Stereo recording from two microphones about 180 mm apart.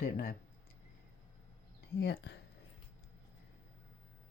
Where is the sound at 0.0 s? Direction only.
55° left (ahead or behind).